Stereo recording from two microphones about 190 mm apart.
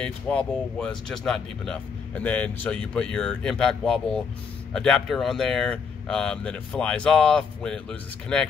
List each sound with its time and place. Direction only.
0.0 s speech: 5° left (ahead or behind)